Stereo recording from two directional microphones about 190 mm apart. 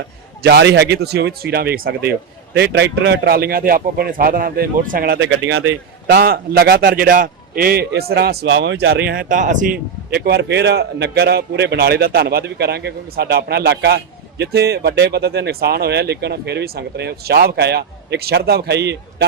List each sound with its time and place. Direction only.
0.4 s speech: 65° right (ahead or behind)
9.0 s speech: 45° right (ahead or behind); by 18.9 s 60° right (ahead or behind)